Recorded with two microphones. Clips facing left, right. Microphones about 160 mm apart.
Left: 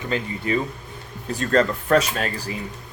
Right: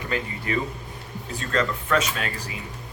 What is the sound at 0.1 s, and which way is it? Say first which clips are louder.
Speech: left 4 dB; 30° left (ahead or behind).